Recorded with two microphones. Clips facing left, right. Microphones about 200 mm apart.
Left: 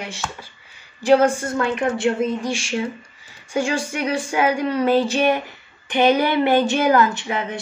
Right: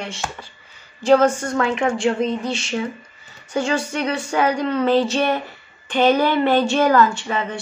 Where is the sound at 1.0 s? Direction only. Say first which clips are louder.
Even; 10° left (ahead or behind).